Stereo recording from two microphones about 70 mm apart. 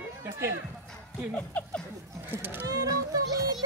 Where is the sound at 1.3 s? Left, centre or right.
Centre.